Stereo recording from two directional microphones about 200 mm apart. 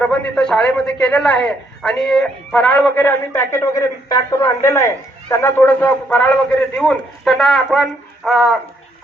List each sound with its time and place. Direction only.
0.0 s a man's voice: 5° left (ahead or behind)